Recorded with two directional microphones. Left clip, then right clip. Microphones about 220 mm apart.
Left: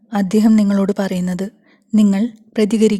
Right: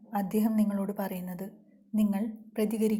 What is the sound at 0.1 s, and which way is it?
Speech, 40° left (ahead or behind).